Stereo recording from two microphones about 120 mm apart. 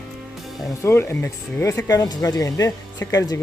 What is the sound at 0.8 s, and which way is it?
Speech, 20° left (ahead or behind).